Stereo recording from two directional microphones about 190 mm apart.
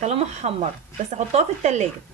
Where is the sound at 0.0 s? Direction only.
35° right (ahead or behind).